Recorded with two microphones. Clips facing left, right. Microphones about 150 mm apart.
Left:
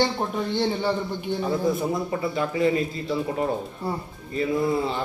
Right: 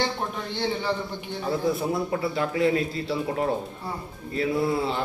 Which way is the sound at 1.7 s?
Centre (ahead or behind).